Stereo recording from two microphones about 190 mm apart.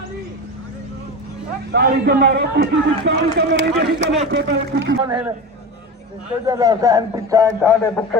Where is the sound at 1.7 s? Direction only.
60° right (ahead or behind).